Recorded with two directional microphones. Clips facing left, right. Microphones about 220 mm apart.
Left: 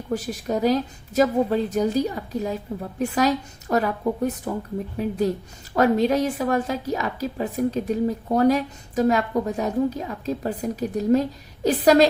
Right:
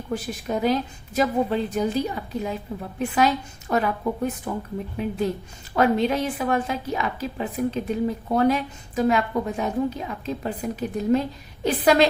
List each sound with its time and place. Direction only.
0.1 s a woman's voice: 40° left (ahead or behind)